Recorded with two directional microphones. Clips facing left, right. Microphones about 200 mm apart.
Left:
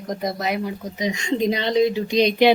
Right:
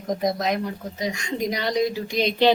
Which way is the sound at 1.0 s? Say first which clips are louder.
Left 5 dB; 20° left (ahead or behind).